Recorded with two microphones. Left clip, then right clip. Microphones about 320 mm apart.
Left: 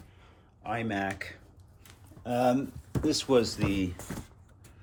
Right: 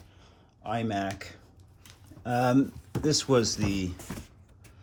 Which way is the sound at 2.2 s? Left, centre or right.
Right.